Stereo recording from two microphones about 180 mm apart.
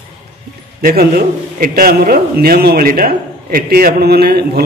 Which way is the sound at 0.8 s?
55° right (ahead or behind).